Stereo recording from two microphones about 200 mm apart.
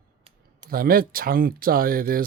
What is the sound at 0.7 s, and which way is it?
Speech, 45° right (ahead or behind).